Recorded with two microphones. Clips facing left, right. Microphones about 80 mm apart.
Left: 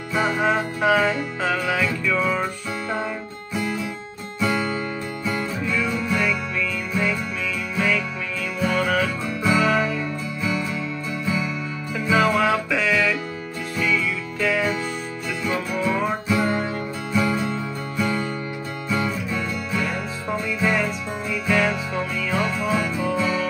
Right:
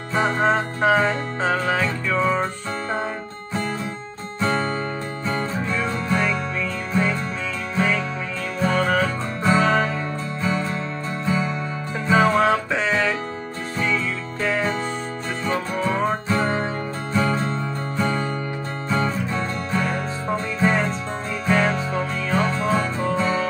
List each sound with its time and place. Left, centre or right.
0.1 s music: right
4.4 s music: right